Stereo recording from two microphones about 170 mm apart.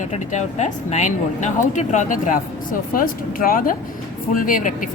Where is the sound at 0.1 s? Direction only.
40° left (ahead or behind).